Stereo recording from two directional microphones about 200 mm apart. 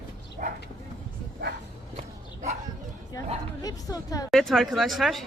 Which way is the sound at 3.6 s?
20° left (ahead or behind).